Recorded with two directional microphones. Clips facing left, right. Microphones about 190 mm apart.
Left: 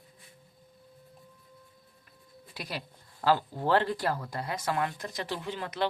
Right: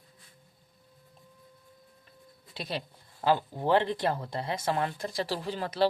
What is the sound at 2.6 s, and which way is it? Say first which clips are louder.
Speech: right 3 dB; 25° right (ahead or behind).